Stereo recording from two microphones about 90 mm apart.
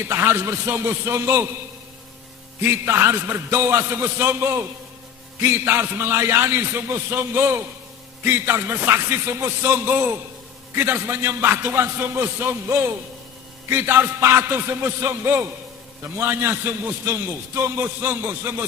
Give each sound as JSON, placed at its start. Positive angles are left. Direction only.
{"t": 0.1, "sound": "a man's voice", "side_deg": -30}
{"t": 2.6, "sound": "a man's voice", "side_deg": -30}